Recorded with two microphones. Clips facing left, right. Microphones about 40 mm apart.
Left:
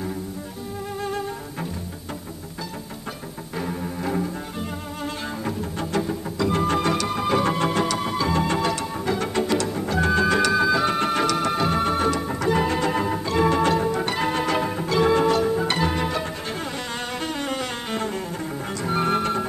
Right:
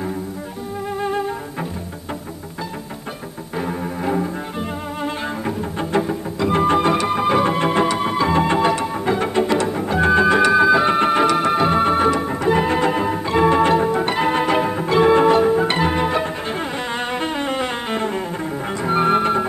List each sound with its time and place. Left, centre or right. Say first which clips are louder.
1.0 s music: right 6 dB; right
3.5 s cello: right 4 dB; centre
17.1 s music: right 4 dB; right